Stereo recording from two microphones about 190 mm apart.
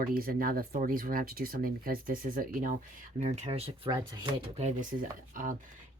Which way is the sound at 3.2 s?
35° right (ahead or behind).